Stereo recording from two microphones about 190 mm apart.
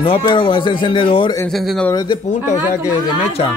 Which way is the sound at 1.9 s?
20° left (ahead or behind).